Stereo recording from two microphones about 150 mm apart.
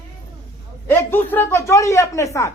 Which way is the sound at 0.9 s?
15° left (ahead or behind).